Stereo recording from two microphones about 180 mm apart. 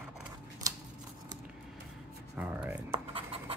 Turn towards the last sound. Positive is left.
turn(degrees=-30)  # may be behind; listen again after turning